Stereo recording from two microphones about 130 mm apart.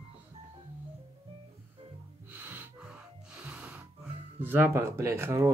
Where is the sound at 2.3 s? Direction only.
15° right (ahead or behind).